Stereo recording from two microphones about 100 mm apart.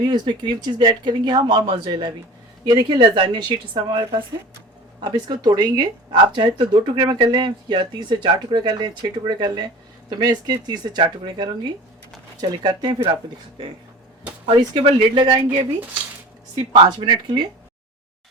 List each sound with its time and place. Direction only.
0.0 s speech: 50° right (ahead or behind)
14.4 s speech: 55° right (ahead or behind)
16.6 s speech: 50° right (ahead or behind)